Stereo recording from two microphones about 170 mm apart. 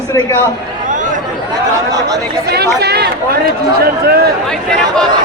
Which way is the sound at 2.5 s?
70° right (ahead or behind).